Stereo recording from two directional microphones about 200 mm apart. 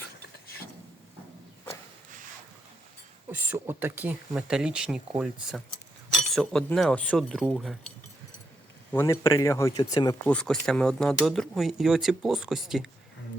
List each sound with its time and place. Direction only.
3.2 s speech: 10° right (ahead or behind)
8.9 s speech: 15° left (ahead or behind)
10.3 s speech: 5° left (ahead or behind)